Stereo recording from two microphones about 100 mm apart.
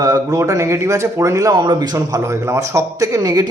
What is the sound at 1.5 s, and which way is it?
Speech, 45° right (ahead or behind).